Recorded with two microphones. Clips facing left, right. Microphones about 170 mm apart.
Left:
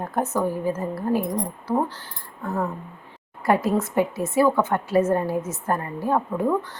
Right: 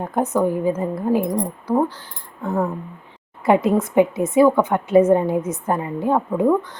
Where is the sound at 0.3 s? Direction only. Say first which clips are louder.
Right 6 dB; 20° right (ahead or behind).